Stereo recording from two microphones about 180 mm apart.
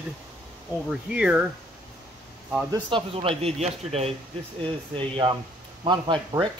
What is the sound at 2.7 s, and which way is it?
A man's voice, 30° right (ahead or behind).